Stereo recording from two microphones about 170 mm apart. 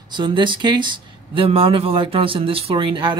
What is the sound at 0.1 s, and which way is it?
Speech, 25° right (ahead or behind).